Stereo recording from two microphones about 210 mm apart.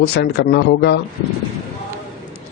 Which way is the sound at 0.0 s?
50° left (ahead or behind).